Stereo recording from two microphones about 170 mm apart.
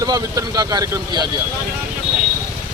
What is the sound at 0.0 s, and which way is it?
A man's voice, 20° right (ahead or behind).